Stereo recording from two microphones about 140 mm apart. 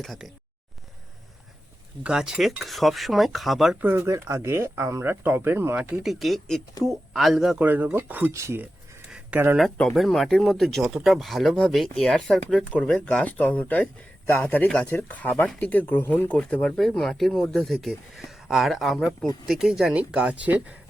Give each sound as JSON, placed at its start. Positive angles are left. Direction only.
{"t": 0.0, "sound": "speech", "side_deg": 0}
{"t": 2.0, "sound": "speech", "side_deg": -5}
{"t": 3.8, "sound": "speech", "side_deg": -15}
{"t": 9.6, "sound": "speech", "side_deg": 5}
{"t": 19.0, "sound": "speech", "side_deg": 25}
{"t": 19.5, "sound": "speech", "side_deg": -5}